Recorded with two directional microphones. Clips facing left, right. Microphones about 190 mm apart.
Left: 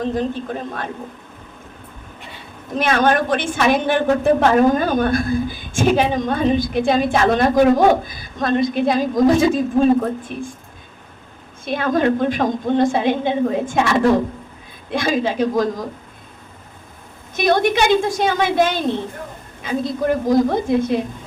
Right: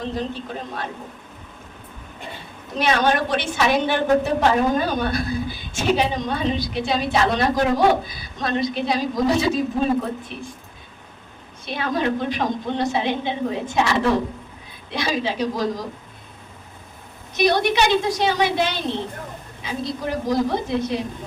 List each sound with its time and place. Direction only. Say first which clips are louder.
0.0 s a woman's voice: left 6 dB; 50° left (ahead or behind)
2.7 s a woman's voice: left 3 dB; 50° left (ahead or behind)
11.6 s a woman's voice: left 6 dB; 50° left (ahead or behind)
17.3 s a woman's voice: left 2 dB; 50° left (ahead or behind)